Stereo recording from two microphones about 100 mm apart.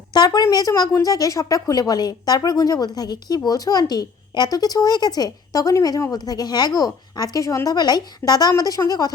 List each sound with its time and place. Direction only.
0.1 s a woman's voice: 45° left (ahead or behind)
0.4 s a woman's voice: 35° left (ahead or behind)